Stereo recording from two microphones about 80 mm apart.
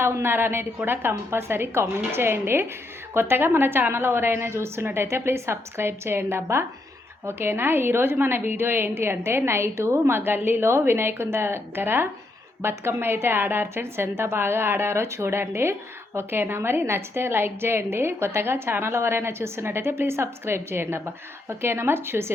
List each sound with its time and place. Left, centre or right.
0.0 s a woman's voice: right